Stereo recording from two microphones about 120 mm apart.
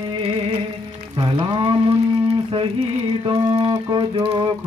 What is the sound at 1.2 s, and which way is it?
Music, 40° right (ahead or behind).